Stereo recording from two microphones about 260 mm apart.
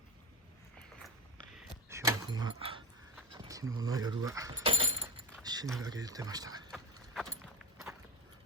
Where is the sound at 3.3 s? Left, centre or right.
Centre.